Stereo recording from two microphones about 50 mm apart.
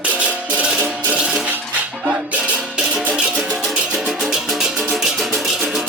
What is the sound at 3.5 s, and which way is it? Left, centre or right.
Music, centre.